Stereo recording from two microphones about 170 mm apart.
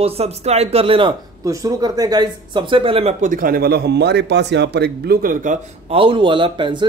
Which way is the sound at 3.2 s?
50° right (ahead or behind).